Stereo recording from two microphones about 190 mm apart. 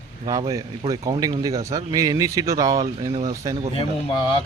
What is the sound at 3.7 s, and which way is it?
Speech, 25° left (ahead or behind).